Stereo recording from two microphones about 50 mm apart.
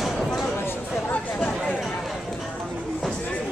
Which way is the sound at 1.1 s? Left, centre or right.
Left.